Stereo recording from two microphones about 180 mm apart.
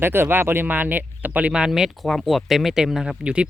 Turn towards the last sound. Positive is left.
turn(degrees=-5)  # may be behind; listen again after turning